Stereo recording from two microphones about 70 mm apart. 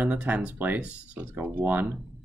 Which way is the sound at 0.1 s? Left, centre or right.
Centre.